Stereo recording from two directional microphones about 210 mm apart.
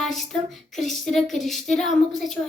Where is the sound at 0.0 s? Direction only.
Centre (ahead or behind).